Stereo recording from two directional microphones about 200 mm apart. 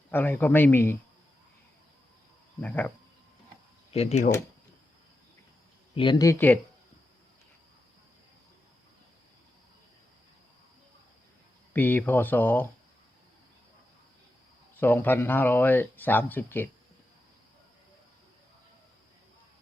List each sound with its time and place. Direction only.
0.1 s speech: 10° left (ahead or behind)
2.6 s speech: 10° left (ahead or behind)
3.9 s speech: 30° left (ahead or behind)
5.9 s speech: 25° left (ahead or behind)
11.7 s speech: 10° left (ahead or behind)
14.8 s speech: 10° left (ahead or behind)